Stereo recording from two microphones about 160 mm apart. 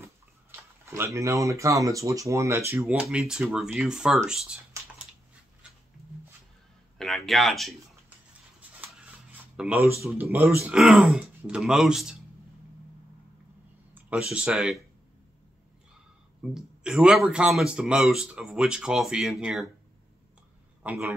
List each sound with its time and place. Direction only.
0.0 s speech: 15° right (ahead or behind)
7.0 s speech: centre (ahead or behind)
9.6 s a man's voice: 10° right (ahead or behind)
10.6 s speech: 5° right (ahead or behind)
13.9 s a sound: 10° right (ahead or behind)
14.3 s speech: 5° right (ahead or behind)
16.5 s speech: 5° right (ahead or behind)
20.8 s a man's voice: 10° right (ahead or behind)